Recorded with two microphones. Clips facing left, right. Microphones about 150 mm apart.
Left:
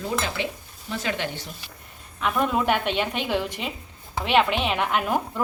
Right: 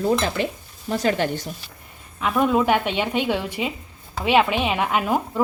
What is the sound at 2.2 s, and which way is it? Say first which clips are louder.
A woman's voice: right 4 dB; centre (ahead or behind).